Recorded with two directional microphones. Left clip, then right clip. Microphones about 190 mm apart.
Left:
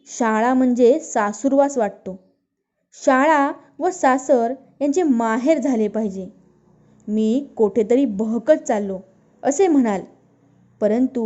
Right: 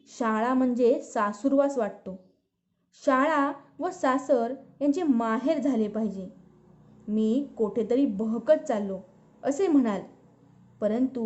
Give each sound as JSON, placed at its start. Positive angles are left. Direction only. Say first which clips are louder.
{"t": 0.0, "sound": "a woman's voice", "louder": "left 8 dB", "side_deg": 25}